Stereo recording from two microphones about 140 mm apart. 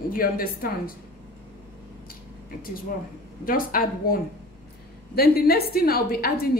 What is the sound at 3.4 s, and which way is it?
A woman's voice, 90° left.